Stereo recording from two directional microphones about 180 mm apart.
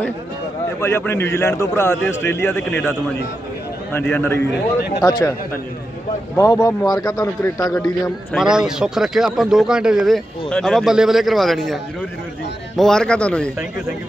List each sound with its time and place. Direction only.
0.7 s a man's voice: 15° left (ahead or behind)
4.1 s a man's voice: 10° left (ahead or behind)
6.3 s a man's voice: 20° left (ahead or behind)
8.3 s a man's voice: 5° right (ahead or behind)